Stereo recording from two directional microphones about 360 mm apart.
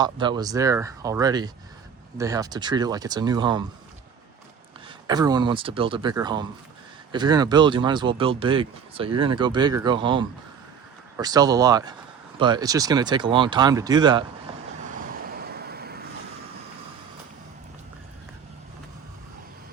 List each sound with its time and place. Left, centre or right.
0.0 s speech: centre
5.0 s speech: centre
14.9 s vehicle: right